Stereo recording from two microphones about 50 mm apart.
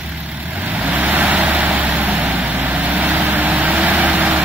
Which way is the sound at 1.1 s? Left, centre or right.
Right.